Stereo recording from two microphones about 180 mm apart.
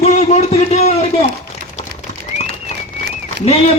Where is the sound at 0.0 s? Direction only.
35° left (ahead or behind).